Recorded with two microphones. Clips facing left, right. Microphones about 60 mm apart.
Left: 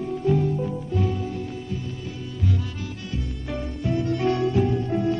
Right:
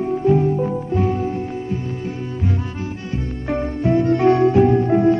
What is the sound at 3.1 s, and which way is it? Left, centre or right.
Music, right.